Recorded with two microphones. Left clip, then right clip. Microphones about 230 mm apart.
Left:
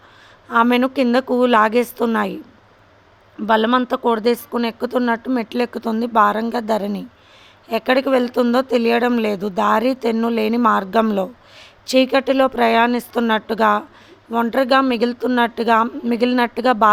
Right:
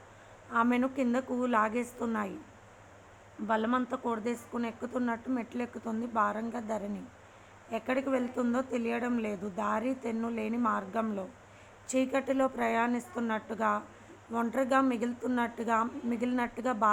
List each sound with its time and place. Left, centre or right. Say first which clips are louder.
0.5 s speech: left 13 dB; left
3.4 s speech: left 14 dB; left
11.9 s speech: left 14 dB; left